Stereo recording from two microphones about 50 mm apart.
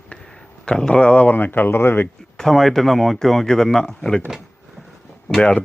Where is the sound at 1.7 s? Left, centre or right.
Left.